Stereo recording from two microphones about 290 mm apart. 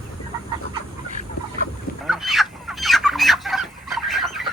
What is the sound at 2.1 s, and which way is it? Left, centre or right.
Fowl, centre.